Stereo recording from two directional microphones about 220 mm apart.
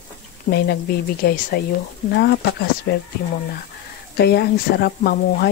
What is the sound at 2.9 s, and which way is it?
Speech, 45° left (ahead or behind).